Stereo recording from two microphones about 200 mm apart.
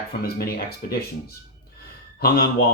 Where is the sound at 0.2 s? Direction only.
50° left (ahead or behind).